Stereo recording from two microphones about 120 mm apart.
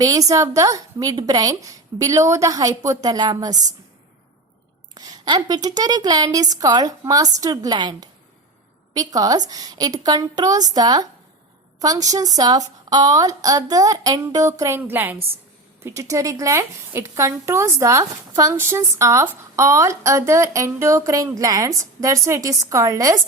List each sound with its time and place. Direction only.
0.0 s a woman's voice: 30° right (ahead or behind)
4.9 s a woman's voice: 35° right (ahead or behind)